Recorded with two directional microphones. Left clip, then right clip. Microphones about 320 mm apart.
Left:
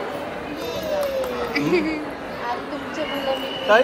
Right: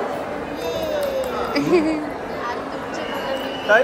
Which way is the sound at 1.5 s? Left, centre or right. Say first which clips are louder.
Right 3 dB; centre.